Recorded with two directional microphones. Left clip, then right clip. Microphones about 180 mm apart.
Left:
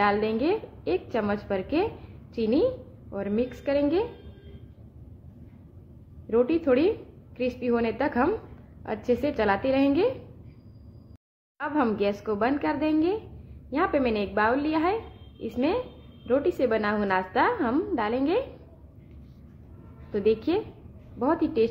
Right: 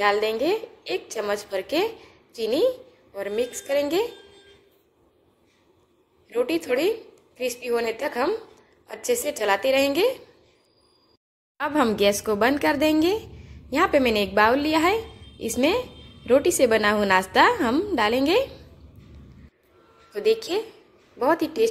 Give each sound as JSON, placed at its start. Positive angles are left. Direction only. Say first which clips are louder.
{"t": 0.0, "sound": "a woman's voice", "louder": "right 3 dB", "side_deg": -10}
{"t": 6.3, "sound": "a woman's voice", "louder": "left 1 dB", "side_deg": -10}
{"t": 11.5, "sound": "a woman's voice", "louder": "right 4 dB", "side_deg": -15}
{"t": 20.2, "sound": "a woman's voice", "louder": "right 2 dB", "side_deg": -15}